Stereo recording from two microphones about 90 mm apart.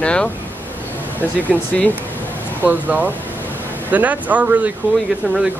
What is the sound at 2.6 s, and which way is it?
Speech, 20° right (ahead or behind).